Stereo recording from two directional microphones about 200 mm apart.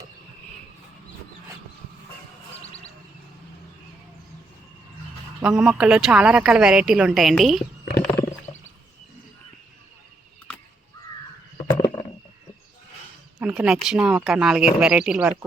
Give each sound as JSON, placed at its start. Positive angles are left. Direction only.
{"t": 5.4, "sound": "a woman's voice", "side_deg": -5}
{"t": 11.7, "sound": "a sound", "side_deg": 20}
{"t": 13.4, "sound": "a woman's voice", "side_deg": -5}